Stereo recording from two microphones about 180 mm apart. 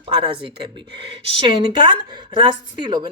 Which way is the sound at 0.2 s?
30° right (ahead or behind).